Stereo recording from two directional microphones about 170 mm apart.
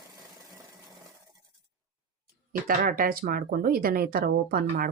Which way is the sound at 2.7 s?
55° right (ahead or behind).